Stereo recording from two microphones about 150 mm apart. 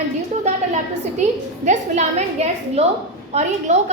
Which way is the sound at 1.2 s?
50° right (ahead or behind).